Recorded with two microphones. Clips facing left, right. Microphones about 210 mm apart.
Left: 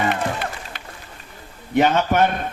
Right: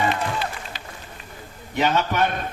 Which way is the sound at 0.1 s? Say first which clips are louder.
Left 2 dB; 55° left (ahead or behind).